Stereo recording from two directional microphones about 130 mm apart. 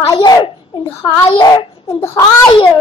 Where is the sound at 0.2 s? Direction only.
30° left (ahead or behind).